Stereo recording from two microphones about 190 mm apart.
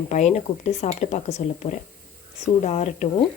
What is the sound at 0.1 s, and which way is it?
Speech, 40° left (ahead or behind).